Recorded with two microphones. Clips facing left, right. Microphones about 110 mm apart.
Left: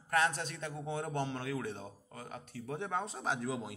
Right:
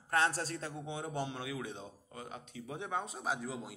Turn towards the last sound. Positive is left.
turn(degrees=-5)  # may be behind; listen again after turning